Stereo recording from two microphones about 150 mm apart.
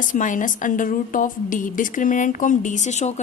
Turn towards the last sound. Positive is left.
turn(degrees=50)  # may be behind; listen again after turning